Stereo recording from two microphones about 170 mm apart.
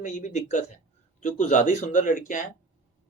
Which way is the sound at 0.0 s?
45° left (ahead or behind).